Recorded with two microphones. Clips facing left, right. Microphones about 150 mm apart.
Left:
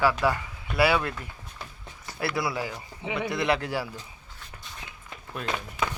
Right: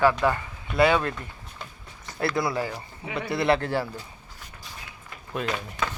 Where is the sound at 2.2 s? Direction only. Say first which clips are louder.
Right 3 dB; 5° left (ahead or behind).